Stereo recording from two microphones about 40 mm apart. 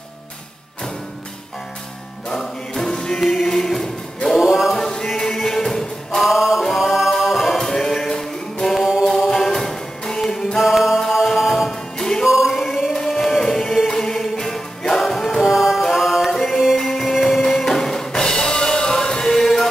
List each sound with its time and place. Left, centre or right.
2.2 s music: centre
3.4 s choir: centre
4.4 s choir: centre
4.7 s music: centre
6.2 s music: centre
7.1 s a capella: centre
7.5 s music: centre
10.6 s music: centre
12.0 s music: centre
12.3 s music: centre
12.9 s music: centre